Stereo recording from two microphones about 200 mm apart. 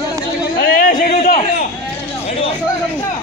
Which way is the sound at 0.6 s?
45° left (ahead or behind).